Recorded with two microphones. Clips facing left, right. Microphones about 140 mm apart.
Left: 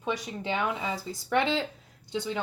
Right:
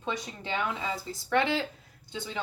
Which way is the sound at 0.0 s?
10° left (ahead or behind).